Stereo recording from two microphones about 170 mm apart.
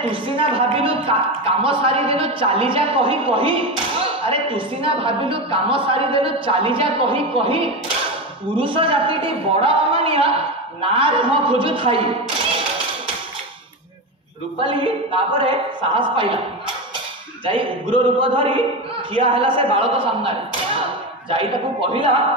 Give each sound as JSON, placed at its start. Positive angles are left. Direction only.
{"t": 0.1, "sound": "a woman's voice", "side_deg": -30}
{"t": 14.6, "sound": "a woman's voice", "side_deg": -30}
{"t": 17.5, "sound": "a woman's voice", "side_deg": -30}